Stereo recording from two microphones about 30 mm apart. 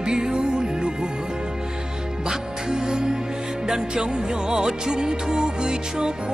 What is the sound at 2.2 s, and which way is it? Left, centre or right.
Music, right.